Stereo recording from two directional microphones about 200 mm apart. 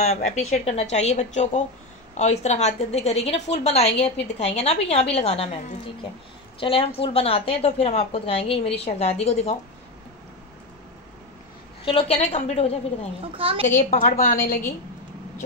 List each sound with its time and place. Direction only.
0.0 s a woman's voice: 35° left (ahead or behind)
6.6 s a woman's voice: 25° left (ahead or behind)
11.8 s a woman's voice: 25° left (ahead or behind)
13.4 s a woman's voice: 30° right (ahead or behind)
13.7 s a woman's voice: 35° left (ahead or behind)